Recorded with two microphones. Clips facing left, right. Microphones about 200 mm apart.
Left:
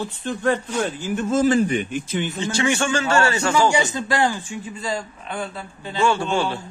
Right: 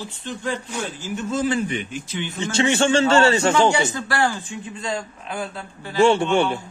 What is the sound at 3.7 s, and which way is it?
Speech, 15° left (ahead or behind).